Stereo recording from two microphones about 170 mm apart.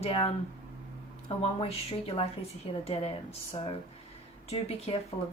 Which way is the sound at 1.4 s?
35° left (ahead or behind).